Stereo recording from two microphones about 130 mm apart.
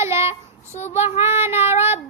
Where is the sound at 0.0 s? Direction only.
20° right (ahead or behind).